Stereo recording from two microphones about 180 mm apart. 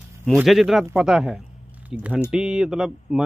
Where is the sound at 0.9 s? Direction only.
5° right (ahead or behind).